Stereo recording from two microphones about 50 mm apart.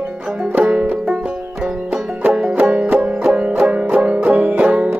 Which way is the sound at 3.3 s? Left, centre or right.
Right.